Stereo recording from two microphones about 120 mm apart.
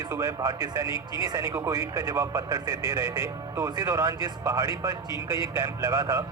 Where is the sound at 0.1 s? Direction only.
25° right (ahead or behind).